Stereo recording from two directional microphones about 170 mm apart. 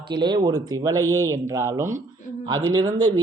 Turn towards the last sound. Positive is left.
turn(degrees=-20)  # may be behind; listen again after turning